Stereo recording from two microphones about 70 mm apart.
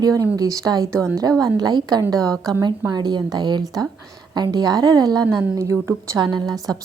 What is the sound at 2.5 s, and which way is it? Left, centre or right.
A woman's voice, right.